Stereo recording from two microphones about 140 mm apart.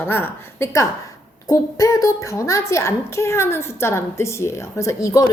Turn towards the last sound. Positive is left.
turn(degrees=25)  # may be behind; listen again after turning